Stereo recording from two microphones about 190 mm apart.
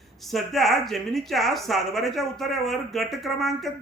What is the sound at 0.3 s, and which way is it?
Speech, centre (ahead or behind).